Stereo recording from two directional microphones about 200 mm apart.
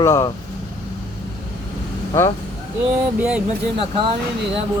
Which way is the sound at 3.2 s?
5° right (ahead or behind).